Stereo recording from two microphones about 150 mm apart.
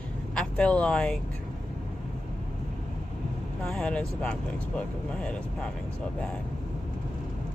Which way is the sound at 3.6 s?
5° left (ahead or behind).